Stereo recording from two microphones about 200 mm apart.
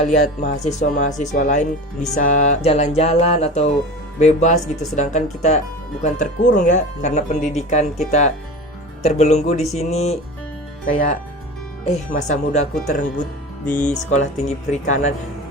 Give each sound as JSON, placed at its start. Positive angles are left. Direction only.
{"t": 0.0, "sound": "speech", "side_deg": 35}
{"t": 11.9, "sound": "speech", "side_deg": 35}
{"t": 13.7, "sound": "speech", "side_deg": 10}
{"t": 14.1, "sound": "speech", "side_deg": 35}